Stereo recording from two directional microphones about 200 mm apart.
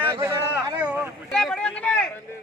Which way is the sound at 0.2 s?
10° right (ahead or behind).